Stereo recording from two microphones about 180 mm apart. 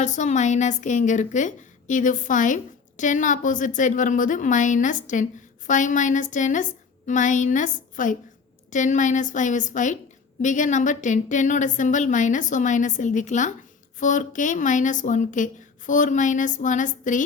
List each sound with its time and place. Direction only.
0.0 s a woman's voice: 40° left (ahead or behind)